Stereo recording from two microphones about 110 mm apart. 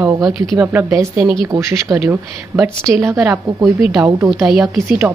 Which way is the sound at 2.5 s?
15° right (ahead or behind).